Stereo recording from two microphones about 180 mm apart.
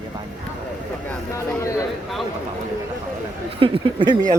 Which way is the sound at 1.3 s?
15° left (ahead or behind).